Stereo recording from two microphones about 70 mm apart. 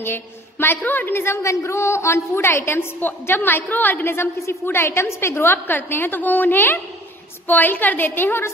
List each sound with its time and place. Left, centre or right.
0.0 s a woman's voice: left